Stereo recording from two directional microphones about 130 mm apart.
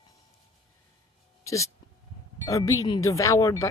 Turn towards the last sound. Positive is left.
turn(degrees=25)  # may be behind; listen again after turning